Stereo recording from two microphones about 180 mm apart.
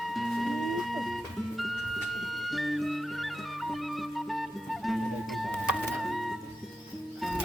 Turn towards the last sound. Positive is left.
turn(degrees=0)  # may be behind; listen again after turning